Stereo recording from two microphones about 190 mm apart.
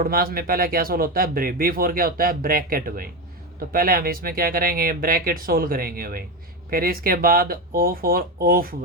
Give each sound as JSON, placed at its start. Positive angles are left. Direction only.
{"t": 0.0, "sound": "speech", "side_deg": -50}